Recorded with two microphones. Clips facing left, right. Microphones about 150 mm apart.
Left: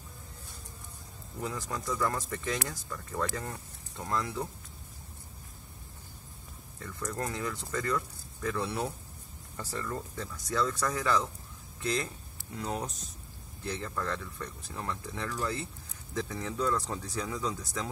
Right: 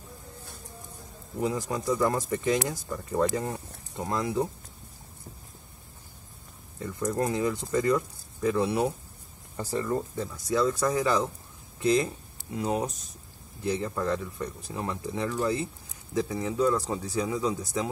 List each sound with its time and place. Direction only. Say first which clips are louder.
1.4 s speech: right 7 dB; 20° right (ahead or behind)
6.8 s speech: right 8 dB; 20° right (ahead or behind)